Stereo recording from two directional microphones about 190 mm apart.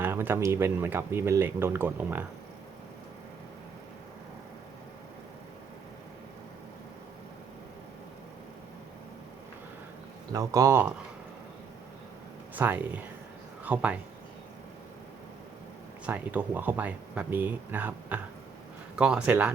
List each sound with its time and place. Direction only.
0.0 s speech: 10° right (ahead or behind)
10.3 s speech: 15° right (ahead or behind)
12.5 s speech: 10° right (ahead or behind)
16.0 s speech: 10° right (ahead or behind)